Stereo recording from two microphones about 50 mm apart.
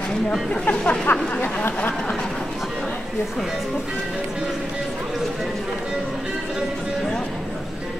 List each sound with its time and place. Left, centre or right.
0.7 s speech: left